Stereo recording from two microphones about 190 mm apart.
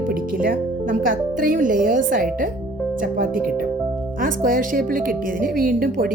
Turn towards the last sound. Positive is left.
turn(degrees=-50)  # may be behind; listen again after turning